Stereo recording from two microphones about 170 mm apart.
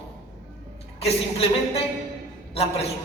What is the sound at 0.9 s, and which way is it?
Speech, 35° left (ahead or behind).